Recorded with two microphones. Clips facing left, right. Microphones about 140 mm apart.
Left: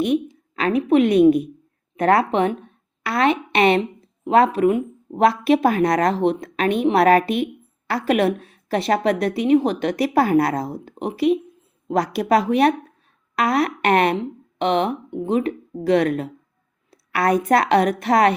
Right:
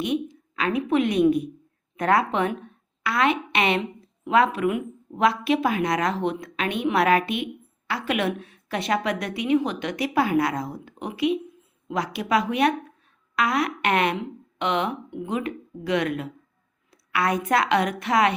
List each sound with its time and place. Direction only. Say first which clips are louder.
0.0 s a woman's voice: left 6 dB; 35° left (ahead or behind)